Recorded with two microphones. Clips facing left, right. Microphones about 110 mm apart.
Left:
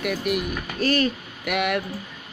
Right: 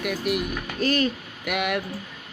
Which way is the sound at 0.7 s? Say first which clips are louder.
Left 1 dB; 70° left (ahead or behind).